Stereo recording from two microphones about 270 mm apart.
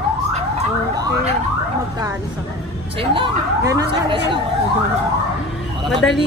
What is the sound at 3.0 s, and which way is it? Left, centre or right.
Speech, centre.